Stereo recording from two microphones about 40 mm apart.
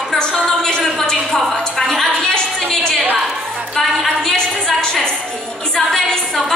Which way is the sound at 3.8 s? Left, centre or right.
Centre.